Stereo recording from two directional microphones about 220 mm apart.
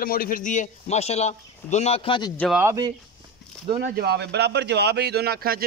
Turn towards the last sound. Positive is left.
turn(degrees=-45)  # may be behind; listen again after turning